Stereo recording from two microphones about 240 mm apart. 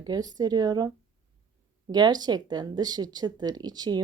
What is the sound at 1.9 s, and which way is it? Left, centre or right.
Speech, centre.